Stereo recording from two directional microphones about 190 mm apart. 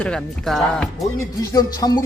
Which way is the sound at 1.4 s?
20° left (ahead or behind).